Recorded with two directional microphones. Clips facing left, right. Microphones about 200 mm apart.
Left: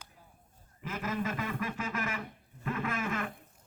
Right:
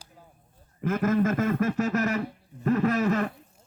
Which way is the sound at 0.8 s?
50° right (ahead or behind).